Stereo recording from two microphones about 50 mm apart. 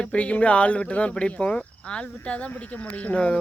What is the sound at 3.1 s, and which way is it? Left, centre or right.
Speech, centre.